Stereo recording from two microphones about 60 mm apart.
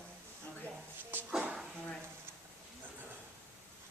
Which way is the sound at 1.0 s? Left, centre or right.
Right.